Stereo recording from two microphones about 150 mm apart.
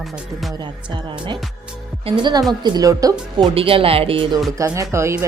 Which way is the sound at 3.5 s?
40° right (ahead or behind).